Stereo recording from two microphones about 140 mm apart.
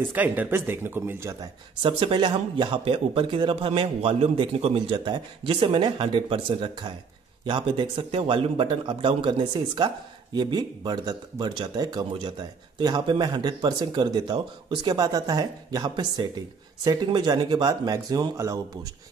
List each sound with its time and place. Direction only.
0.1 s speech: 15° right (ahead or behind)
1.8 s speech: 40° right (ahead or behind); by 18.6 s 25° right (ahead or behind)